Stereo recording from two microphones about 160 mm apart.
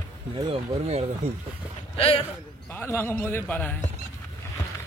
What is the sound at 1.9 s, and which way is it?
Speech, 35° left (ahead or behind).